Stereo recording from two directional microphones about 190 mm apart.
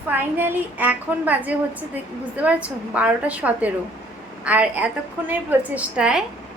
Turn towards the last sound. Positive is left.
turn(degrees=-5)  # may be behind; listen again after turning